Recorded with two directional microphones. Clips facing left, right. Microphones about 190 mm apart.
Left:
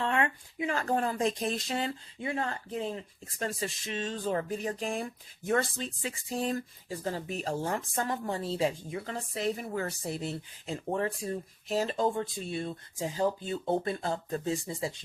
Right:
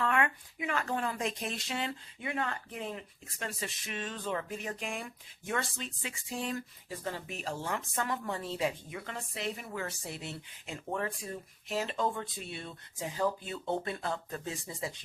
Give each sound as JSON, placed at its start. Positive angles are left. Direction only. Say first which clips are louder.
{"t": 0.0, "sound": "speech", "louder": "left 1 dB", "side_deg": 30}